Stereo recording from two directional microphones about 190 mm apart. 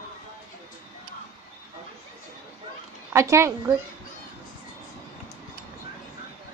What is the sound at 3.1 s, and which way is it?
Speech, 15° right (ahead or behind).